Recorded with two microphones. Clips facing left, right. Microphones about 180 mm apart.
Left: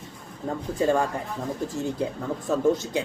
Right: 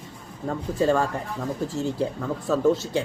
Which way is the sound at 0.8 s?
15° left (ahead or behind).